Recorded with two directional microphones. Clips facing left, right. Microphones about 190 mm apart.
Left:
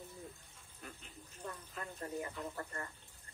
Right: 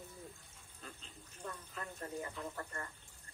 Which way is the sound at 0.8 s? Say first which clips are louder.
Left 1 dB; 20° left (ahead or behind).